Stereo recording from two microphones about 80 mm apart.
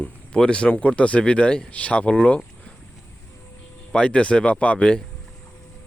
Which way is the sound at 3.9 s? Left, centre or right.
Centre.